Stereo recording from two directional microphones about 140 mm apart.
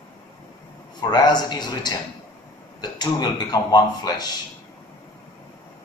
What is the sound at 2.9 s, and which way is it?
Speech, 30° left (ahead or behind).